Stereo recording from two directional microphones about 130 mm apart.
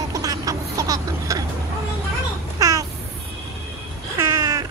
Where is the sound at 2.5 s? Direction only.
25° right (ahead or behind).